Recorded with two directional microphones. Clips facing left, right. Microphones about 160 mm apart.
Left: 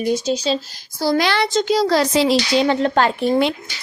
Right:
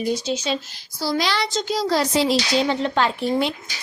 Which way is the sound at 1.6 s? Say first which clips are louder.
Left 3 dB; 75° left (ahead or behind).